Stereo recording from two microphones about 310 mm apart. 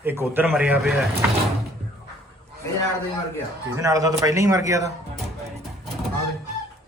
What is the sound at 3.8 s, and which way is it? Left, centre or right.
A man's voice, centre.